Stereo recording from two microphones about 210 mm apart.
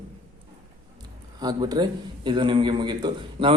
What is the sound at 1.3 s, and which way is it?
A man's voice, 20° right (ahead or behind).